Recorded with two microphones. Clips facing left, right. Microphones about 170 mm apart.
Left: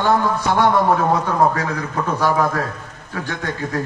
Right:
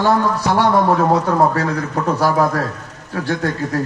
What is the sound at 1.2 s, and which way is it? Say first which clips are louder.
A man's voice: right 2 dB; 35° right (ahead or behind).